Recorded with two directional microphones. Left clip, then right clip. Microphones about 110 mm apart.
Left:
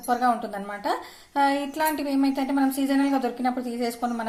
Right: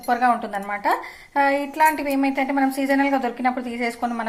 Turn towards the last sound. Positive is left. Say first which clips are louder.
# right 3 dB
turn(degrees=15)  # may be behind; listen again after turning